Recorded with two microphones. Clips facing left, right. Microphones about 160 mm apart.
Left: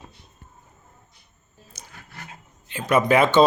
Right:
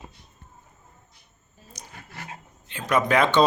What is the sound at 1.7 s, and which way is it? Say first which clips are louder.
Dog: right 2 dB; 5° left (ahead or behind).